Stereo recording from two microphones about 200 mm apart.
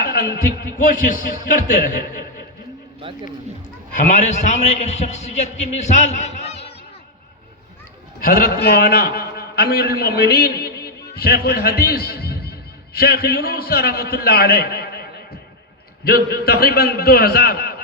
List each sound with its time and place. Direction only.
0.0 s a man's voice: 50° left (ahead or behind)
3.9 s a man's voice: 40° left (ahead or behind)
8.2 s a man's voice: 45° left (ahead or behind)
16.0 s a man's voice: 50° left (ahead or behind)